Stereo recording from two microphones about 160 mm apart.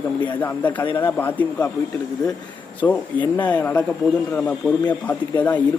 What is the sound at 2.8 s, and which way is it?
A man's voice, 20° left (ahead or behind).